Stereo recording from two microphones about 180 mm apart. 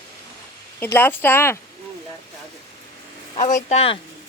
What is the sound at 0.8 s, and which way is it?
Speech, 10° left (ahead or behind).